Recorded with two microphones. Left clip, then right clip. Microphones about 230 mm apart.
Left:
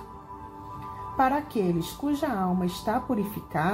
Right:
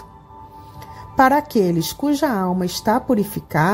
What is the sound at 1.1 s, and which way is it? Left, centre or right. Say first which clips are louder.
Speech: right 10 dB; right.